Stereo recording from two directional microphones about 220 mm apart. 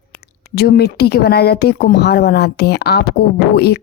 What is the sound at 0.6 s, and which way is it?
Speech, 45° left (ahead or behind).